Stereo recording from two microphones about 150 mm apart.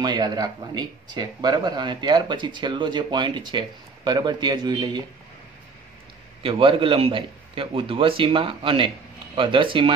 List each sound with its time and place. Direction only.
0.0 s speech: 30° right (ahead or behind)
6.4 s a man's voice: 35° right (ahead or behind)